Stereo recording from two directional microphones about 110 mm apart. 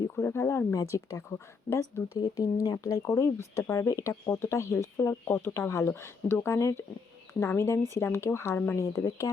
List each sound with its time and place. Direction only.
0.2 s speech: 25° left (ahead or behind)